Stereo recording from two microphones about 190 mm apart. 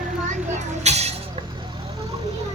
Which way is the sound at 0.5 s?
35° right (ahead or behind).